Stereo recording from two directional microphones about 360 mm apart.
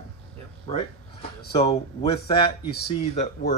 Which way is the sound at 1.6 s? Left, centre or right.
Centre.